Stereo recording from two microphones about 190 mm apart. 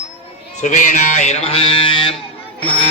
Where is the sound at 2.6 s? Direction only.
25° right (ahead or behind).